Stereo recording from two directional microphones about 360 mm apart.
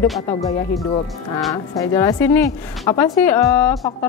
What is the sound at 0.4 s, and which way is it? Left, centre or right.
Speech, centre.